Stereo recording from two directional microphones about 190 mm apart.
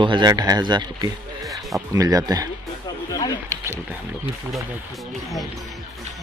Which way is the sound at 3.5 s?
15° right (ahead or behind).